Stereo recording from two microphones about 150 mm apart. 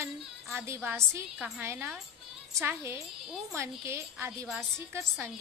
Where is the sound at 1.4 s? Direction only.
5° right (ahead or behind).